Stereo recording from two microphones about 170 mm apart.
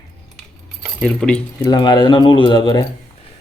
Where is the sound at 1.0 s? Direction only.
5° left (ahead or behind).